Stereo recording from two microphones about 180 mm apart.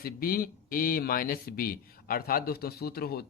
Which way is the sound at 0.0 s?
55° left (ahead or behind).